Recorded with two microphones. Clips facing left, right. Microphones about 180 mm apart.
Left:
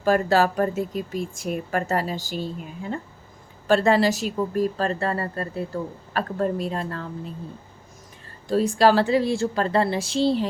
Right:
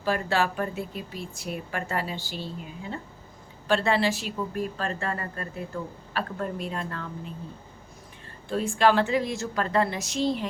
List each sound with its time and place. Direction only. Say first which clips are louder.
0.0 s a woman's voice: left 6 dB; 40° left (ahead or behind)
3.7 s speech: left 5 dB; 40° left (ahead or behind)
8.4 s speech: left 4 dB; 40° left (ahead or behind)